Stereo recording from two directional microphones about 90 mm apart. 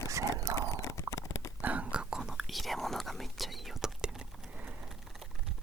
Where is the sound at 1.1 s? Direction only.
35° left (ahead or behind).